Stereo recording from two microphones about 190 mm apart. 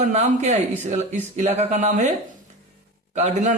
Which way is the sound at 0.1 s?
35° right (ahead or behind).